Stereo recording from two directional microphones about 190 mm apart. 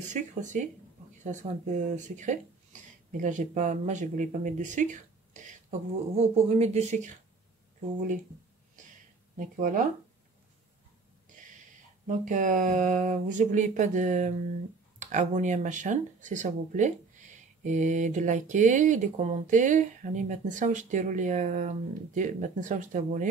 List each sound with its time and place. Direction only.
0.0 s speech: 40° right (ahead or behind)
9.4 s speech: 45° right (ahead or behind)
11.2 s a sound: 40° right (ahead or behind)
12.1 s speech: 45° right (ahead or behind)